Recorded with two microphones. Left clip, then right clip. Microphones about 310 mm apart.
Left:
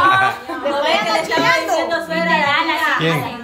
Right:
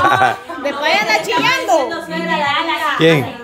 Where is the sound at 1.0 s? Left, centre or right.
Right.